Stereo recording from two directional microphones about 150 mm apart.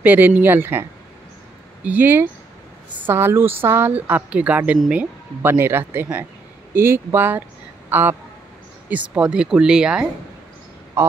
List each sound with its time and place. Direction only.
0.0 s speech: 10° right (ahead or behind)
11.0 s a man's voice: 15° right (ahead or behind)